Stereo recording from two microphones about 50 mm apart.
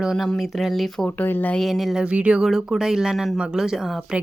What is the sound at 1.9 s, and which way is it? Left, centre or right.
Speech, centre.